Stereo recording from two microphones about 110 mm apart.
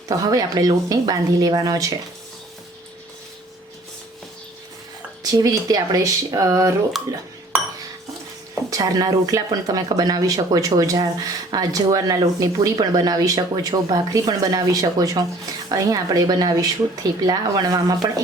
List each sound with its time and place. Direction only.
0.2 s speech: 35° right (ahead or behind)
5.2 s speech: 35° right (ahead or behind)
8.7 s speech: 35° right (ahead or behind)